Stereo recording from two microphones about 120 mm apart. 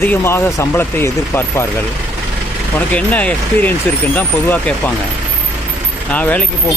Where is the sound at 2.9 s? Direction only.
10° left (ahead or behind).